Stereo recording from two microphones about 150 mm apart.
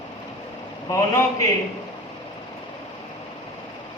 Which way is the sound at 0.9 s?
20° left (ahead or behind).